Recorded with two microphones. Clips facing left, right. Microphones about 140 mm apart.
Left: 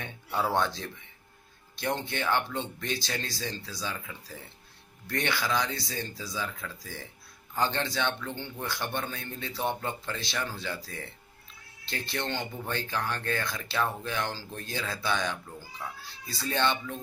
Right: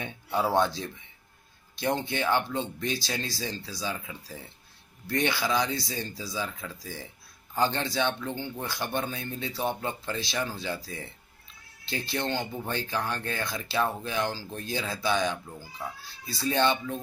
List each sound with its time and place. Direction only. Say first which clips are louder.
0.0 s speech: right 2 dB; 10° right (ahead or behind)
5.0 s speech: right 3 dB; 15° right (ahead or behind)